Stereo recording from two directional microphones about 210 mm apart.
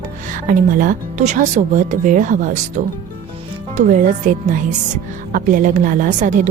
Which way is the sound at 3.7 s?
35° right (ahead or behind).